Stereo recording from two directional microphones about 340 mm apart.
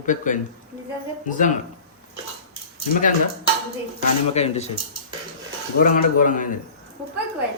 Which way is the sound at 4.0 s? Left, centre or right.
Centre.